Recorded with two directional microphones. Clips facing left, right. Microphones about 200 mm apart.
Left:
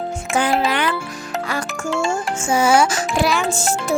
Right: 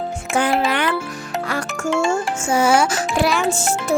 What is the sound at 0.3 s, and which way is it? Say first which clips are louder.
Music: even; 60° right (ahead or behind).